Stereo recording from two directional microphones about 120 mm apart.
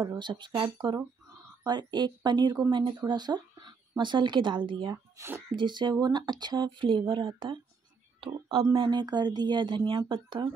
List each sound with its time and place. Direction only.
0.2 s speech: 40° right (ahead or behind)
4.9 s speech: 20° right (ahead or behind)
5.6 s speech: 40° right (ahead or behind)